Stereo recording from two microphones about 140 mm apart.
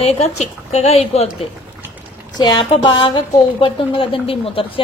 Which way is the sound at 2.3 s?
35° left (ahead or behind).